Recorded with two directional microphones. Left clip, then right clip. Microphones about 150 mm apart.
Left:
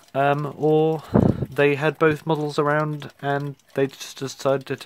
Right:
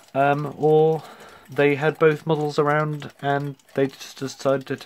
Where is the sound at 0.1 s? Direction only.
50° left (ahead or behind).